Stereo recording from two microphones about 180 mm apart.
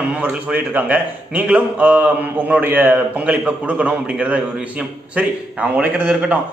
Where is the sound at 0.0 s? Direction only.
5° right (ahead or behind).